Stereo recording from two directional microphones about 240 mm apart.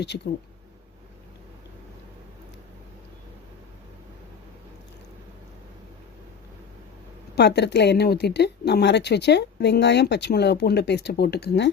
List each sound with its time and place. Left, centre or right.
7.3 s speech: left